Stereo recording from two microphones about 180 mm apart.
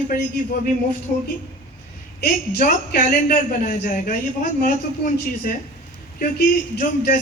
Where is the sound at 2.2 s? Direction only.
55° left (ahead or behind).